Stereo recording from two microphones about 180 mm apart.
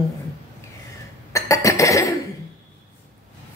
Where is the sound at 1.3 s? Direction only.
15° left (ahead or behind).